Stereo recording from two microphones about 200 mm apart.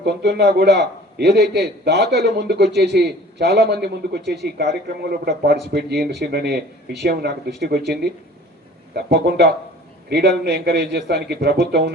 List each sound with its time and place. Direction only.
0.0 s a man's voice: 55° right (ahead or behind)
9.0 s a man's voice: 55° right (ahead or behind)